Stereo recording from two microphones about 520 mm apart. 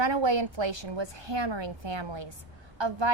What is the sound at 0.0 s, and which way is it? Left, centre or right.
A woman's voice, right.